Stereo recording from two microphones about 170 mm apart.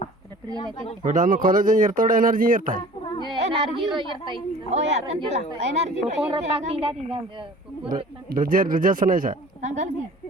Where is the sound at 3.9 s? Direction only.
30° right (ahead or behind).